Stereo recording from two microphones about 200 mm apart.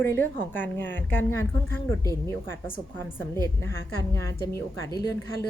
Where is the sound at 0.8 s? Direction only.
65° left (ahead or behind).